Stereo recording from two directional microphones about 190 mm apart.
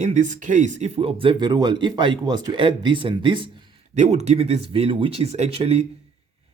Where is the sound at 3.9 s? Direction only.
35° right (ahead or behind).